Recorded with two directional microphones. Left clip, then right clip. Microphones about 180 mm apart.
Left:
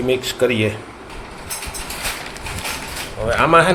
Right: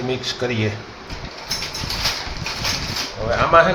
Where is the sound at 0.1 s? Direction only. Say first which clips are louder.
Left 7 dB; 50° left (ahead or behind).